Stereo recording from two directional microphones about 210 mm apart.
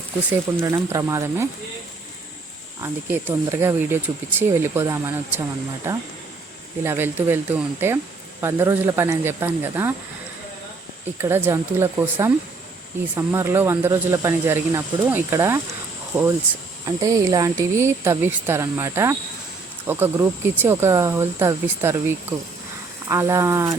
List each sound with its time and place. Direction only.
0.3 s speech: 10° right (ahead or behind)
2.8 s speech: 10° right (ahead or behind)
11.2 s speech: 10° right (ahead or behind)